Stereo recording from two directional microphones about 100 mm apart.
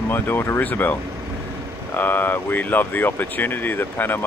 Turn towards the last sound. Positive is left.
turn(degrees=20)  # may be behind; listen again after turning